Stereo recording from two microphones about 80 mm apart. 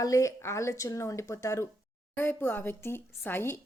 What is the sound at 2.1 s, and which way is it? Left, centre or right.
A woman's voice, left.